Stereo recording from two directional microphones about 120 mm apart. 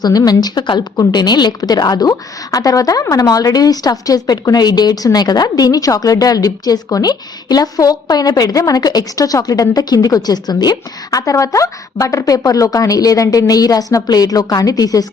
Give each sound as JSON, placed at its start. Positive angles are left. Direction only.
{"t": 0.0, "sound": "a woman's voice", "side_deg": 30}